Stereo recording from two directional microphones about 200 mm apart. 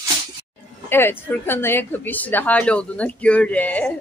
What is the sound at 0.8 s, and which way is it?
A woman's voice, 10° left (ahead or behind).